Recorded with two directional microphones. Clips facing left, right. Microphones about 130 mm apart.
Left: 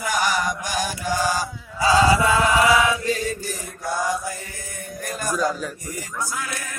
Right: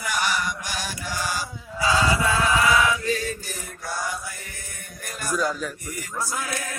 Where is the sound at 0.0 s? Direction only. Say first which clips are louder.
Left 4 dB; 45° left (ahead or behind).